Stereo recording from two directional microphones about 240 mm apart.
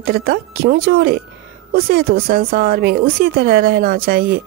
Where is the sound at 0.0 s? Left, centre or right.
Right.